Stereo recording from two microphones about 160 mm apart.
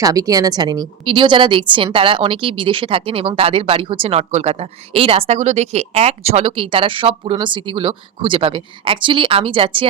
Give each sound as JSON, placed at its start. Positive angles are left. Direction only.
{"t": 0.0, "sound": "a woman's voice", "side_deg": -20}